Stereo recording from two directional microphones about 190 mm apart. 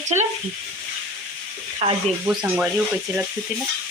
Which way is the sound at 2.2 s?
5° right (ahead or behind).